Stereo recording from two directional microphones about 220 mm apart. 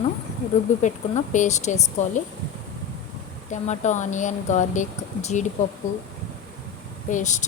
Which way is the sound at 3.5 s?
30° left (ahead or behind).